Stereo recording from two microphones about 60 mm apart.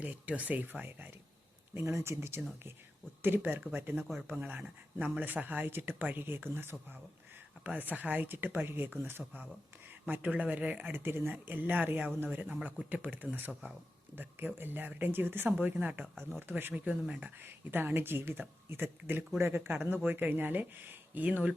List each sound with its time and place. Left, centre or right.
0.0 s speech: right
1.7 s speech: right
7.6 s speech: right
10.9 s speech: right
16.7 s speech: right
17.4 s speech: right